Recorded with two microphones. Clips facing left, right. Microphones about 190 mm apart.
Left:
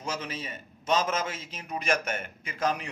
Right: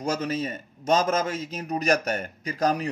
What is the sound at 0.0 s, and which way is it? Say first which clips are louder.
Speech: right 8 dB; 40° right (ahead or behind).